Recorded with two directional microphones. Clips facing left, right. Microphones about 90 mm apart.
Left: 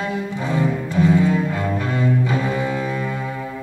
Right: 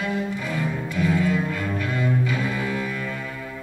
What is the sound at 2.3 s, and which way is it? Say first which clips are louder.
Cello: left 4 dB; 30° left (ahead or behind).